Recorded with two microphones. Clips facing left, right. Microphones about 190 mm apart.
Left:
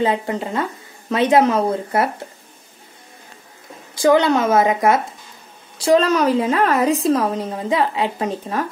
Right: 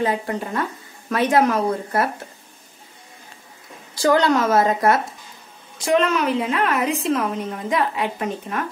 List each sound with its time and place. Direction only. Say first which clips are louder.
0.0 s speech: left 3 dB; 20° left (ahead or behind)
4.0 s speech: left 3 dB; 20° left (ahead or behind)
5.9 s a woman's voice: left 4 dB; 35° left (ahead or behind)